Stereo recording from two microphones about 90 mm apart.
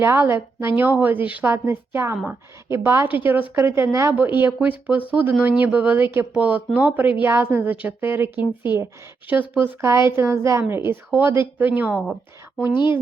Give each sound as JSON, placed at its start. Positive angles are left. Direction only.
{"t": 0.0, "sound": "a woman's voice", "side_deg": -25}
{"t": 9.8, "sound": "a woman's voice", "side_deg": -30}